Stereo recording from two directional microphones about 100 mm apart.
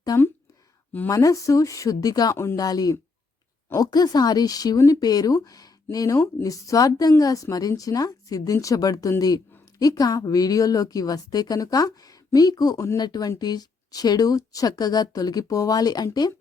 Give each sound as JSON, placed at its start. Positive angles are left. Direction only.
{"t": 1.1, "sound": "speech", "side_deg": 35}
{"t": 2.3, "sound": "speech", "side_deg": 25}
{"t": 2.6, "sound": "speech", "side_deg": 40}